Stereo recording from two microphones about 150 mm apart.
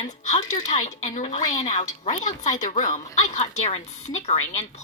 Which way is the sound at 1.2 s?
40° left (ahead or behind).